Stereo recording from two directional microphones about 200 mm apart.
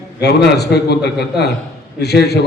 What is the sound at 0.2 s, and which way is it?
Speech, 55° left (ahead or behind).